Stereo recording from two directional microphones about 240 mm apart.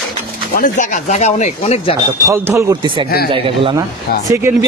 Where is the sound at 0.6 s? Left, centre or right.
Left.